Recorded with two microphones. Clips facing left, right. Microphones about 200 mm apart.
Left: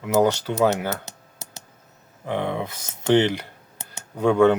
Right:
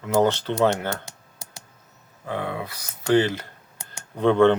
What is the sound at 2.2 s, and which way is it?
Speech, 20° left (ahead or behind).